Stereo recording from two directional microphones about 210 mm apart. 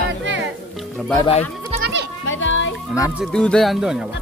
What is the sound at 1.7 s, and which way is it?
Goat, 50° right (ahead or behind).